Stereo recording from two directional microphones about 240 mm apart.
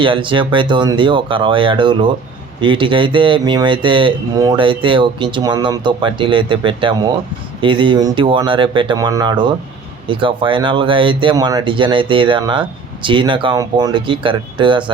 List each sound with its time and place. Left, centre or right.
0.0 s speech: right